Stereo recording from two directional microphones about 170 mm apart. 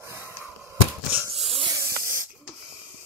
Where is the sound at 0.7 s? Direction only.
10° right (ahead or behind).